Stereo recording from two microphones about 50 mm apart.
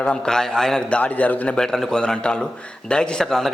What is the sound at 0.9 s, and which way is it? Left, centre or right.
Speech, left.